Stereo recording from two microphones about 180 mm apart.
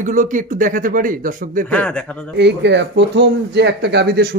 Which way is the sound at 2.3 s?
75° right (ahead or behind).